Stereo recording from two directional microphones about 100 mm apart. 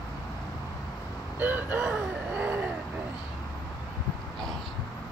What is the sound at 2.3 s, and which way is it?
Vehicle, 15° right (ahead or behind).